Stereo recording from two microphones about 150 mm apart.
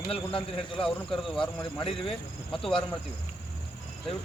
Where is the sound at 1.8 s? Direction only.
35° left (ahead or behind).